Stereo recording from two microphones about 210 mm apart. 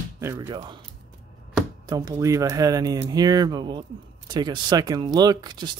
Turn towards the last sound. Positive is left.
turn(degrees=-20)  # may be behind; listen again after turning